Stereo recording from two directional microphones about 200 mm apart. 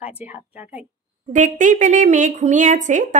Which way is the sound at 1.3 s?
40° right (ahead or behind).